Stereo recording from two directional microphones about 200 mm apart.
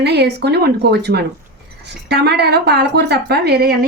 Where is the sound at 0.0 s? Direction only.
55° right (ahead or behind).